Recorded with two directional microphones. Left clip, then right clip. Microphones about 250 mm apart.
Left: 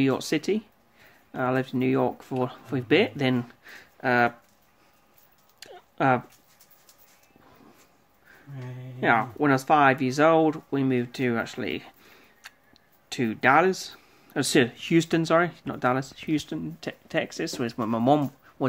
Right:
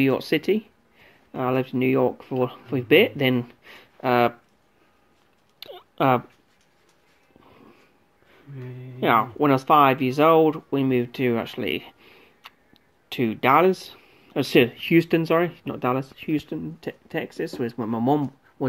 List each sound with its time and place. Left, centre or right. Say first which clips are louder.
0.0 s speech: right 3 dB; left
5.7 s a sound: right 3 dB; centre
9.0 s speech: right 3 dB; centre